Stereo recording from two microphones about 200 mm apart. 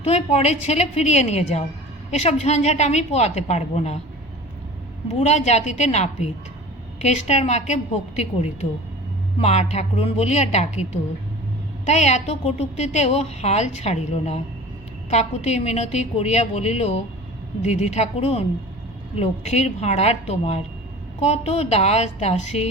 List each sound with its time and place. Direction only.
0.0 s a woman's voice: 30° left (ahead or behind)
5.2 s a woman's voice: 35° left (ahead or behind)
11.9 s a woman's voice: 35° left (ahead or behind)